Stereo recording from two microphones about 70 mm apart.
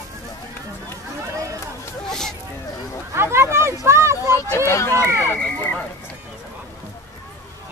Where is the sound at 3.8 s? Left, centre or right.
Right.